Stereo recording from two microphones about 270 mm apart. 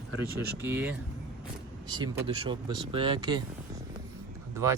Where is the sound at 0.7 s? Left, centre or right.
Centre.